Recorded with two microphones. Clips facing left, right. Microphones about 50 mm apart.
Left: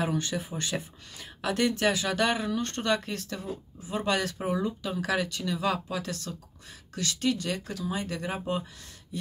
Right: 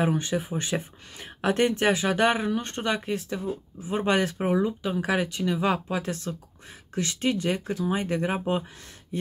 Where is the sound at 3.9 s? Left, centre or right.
Right.